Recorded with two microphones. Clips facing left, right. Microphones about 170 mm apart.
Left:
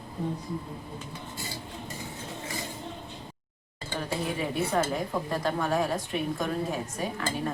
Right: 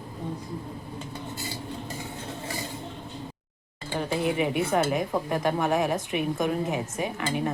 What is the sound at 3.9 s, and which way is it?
Speech, 20° right (ahead or behind).